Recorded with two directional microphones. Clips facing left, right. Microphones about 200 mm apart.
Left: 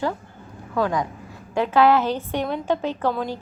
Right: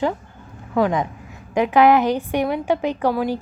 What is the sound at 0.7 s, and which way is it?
A woman's voice, 20° right (ahead or behind).